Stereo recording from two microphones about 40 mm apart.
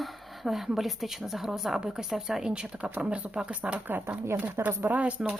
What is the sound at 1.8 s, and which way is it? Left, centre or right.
Speech, centre.